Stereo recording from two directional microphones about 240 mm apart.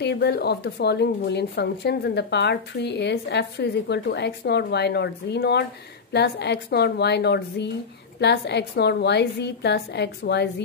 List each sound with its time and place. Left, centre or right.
0.0 s a woman's voice: left